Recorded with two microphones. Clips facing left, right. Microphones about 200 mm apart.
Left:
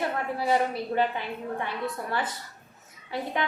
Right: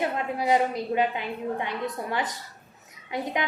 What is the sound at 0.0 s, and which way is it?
A woman's voice, 15° right (ahead or behind).